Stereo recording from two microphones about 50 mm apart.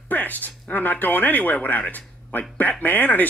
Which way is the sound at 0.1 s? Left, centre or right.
Left.